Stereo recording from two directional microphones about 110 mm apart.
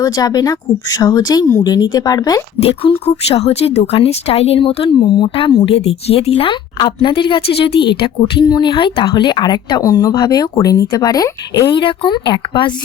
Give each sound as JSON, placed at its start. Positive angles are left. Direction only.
{"t": 0.0, "sound": "speech", "side_deg": 35}
{"t": 2.6, "sound": "speech", "side_deg": 65}
{"t": 11.7, "sound": "speech", "side_deg": 45}